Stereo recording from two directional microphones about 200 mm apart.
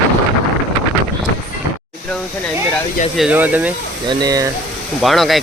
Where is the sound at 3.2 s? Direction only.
10° right (ahead or behind).